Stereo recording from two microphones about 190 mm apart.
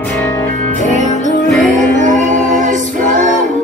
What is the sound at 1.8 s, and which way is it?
Music, 40° right (ahead or behind).